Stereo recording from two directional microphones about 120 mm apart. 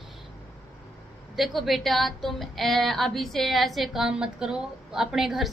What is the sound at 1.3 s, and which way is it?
Speech, centre (ahead or behind).